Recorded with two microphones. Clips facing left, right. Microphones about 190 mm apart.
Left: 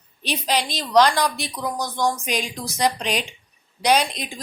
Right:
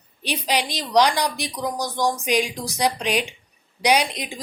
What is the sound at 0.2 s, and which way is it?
A woman's voice, 15° right (ahead or behind).